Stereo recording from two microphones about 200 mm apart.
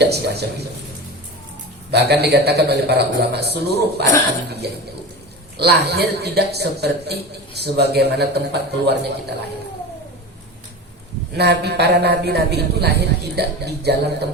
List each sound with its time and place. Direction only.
0.0 s a man's voice: 55° right (ahead or behind)
1.9 s a man's voice: 55° right (ahead or behind)
5.5 s a man's voice: 55° right (ahead or behind)
11.3 s a man's voice: 55° right (ahead or behind)